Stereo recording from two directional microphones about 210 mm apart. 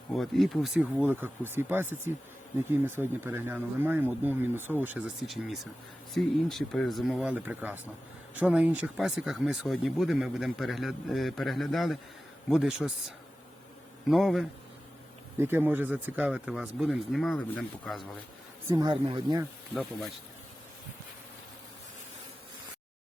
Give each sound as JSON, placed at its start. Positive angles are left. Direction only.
{"t": 0.1, "sound": "speech", "side_deg": 0}
{"t": 18.7, "sound": "speech", "side_deg": -20}
{"t": 19.7, "sound": "speech", "side_deg": 0}